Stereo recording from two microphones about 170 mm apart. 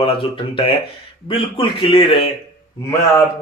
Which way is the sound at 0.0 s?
35° left (ahead or behind).